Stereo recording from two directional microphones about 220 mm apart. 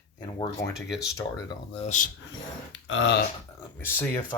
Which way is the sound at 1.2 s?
15° left (ahead or behind).